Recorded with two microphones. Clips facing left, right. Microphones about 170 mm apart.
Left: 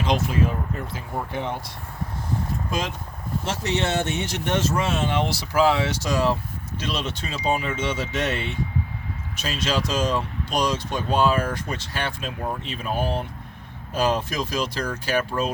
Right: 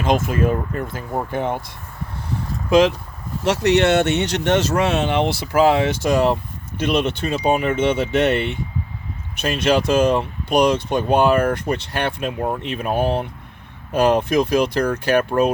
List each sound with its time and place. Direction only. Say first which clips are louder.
0.0 s speech: right 4 dB; 50° right (ahead or behind)
2.6 s speech: right 13 dB; 75° right (ahead or behind)